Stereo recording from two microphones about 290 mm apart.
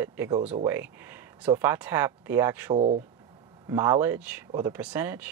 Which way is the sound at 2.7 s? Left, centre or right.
Right.